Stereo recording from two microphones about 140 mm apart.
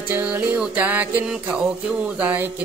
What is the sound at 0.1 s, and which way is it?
Music, 10° right (ahead or behind).